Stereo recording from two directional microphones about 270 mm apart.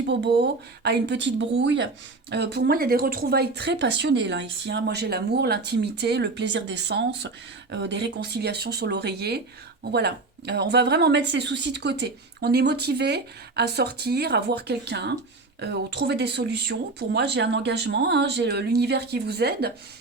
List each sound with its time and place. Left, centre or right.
0.1 s speech: right